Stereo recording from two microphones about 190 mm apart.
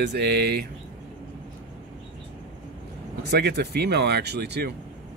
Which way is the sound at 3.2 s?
60° right (ahead or behind).